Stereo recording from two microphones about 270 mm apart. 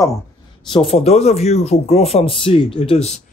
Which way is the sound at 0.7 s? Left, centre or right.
Centre.